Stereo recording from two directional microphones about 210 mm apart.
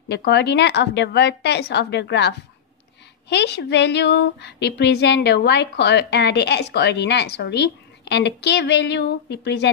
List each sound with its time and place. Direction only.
0.1 s speech: 55° left (ahead or behind)